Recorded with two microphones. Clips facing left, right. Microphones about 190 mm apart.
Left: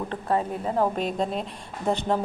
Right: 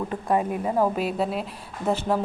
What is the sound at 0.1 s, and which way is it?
A woman's voice, 15° right (ahead or behind).